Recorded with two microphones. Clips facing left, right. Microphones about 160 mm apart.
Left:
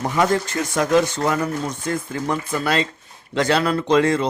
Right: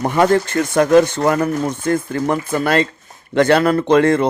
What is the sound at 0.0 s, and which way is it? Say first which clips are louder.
Speech: right 5 dB; 60° right (ahead or behind).